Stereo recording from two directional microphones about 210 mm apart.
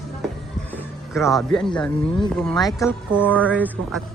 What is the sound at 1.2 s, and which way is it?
Speech, 15° left (ahead or behind).